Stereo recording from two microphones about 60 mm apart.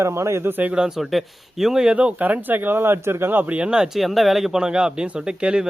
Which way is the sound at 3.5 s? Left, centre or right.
Centre.